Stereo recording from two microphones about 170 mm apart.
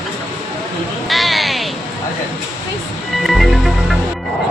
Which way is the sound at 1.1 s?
Centre (ahead or behind).